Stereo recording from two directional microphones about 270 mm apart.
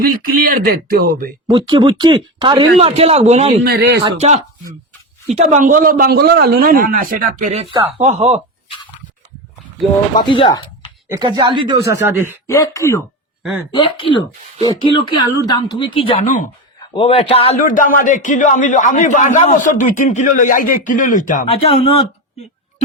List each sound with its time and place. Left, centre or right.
0.0 s a man's voice: right
1.5 s speech: centre; by 4.0 s right
4.0 s a man's voice: right
10.2 s speech: centre
11.1 s speech: centre
12.5 s a man's voice: centre